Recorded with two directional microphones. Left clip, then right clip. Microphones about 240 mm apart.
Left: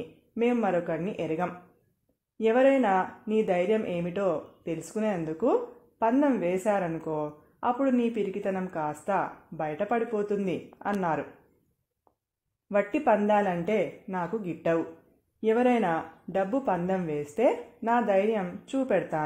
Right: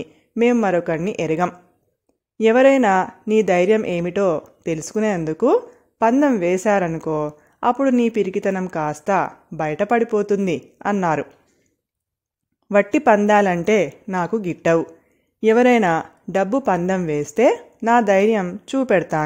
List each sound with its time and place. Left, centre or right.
0.0 s speech: right
12.6 s speech: right